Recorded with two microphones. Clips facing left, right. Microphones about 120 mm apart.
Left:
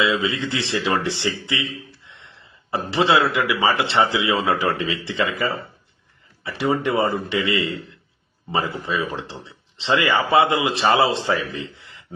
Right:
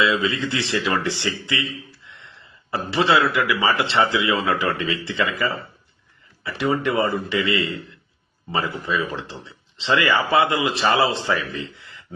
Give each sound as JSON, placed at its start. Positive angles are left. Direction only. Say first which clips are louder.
{"t": 0.0, "sound": "speech", "louder": "even", "side_deg": 25}
{"t": 2.6, "sound": "speech", "louder": "left 1 dB", "side_deg": 25}